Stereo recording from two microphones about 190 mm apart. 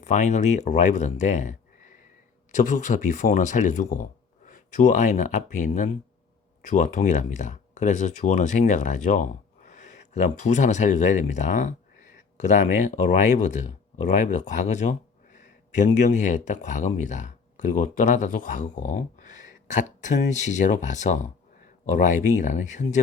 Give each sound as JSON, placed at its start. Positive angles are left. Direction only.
{"t": 0.0, "sound": "speech", "side_deg": 40}